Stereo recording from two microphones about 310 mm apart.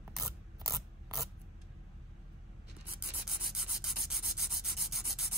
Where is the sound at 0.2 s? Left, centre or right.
Centre.